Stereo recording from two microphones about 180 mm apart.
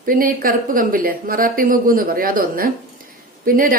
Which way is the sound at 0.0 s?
50° right (ahead or behind).